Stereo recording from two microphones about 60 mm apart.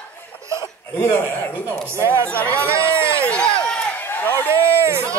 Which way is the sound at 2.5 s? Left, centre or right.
Right.